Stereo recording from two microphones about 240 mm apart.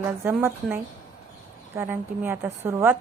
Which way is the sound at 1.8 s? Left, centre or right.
Centre.